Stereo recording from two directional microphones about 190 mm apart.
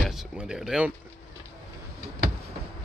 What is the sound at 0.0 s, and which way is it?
Speech, 5° right (ahead or behind).